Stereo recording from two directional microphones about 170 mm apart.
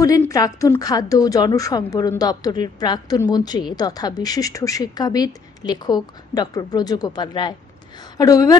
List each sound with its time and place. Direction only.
0.0 s a woman's voice: 20° left (ahead or behind)